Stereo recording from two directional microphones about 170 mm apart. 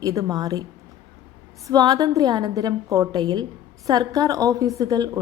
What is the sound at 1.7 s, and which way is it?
A woman's voice, 20° right (ahead or behind).